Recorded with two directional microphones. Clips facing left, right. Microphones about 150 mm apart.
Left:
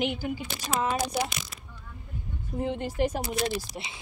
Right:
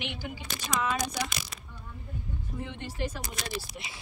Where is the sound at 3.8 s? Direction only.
35° left (ahead or behind).